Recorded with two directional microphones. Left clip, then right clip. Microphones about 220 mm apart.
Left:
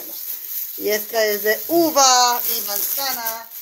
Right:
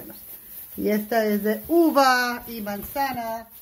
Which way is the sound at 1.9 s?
25° right (ahead or behind).